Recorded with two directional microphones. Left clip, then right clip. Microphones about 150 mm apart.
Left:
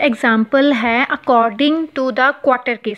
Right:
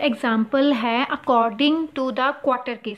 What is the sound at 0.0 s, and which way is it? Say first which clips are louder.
Speech: left 7 dB; 30° left (ahead or behind).